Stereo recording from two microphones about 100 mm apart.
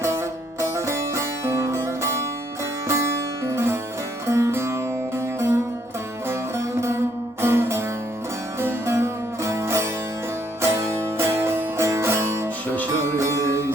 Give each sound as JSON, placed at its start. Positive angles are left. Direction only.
{"t": 0.0, "sound": "music", "side_deg": -30}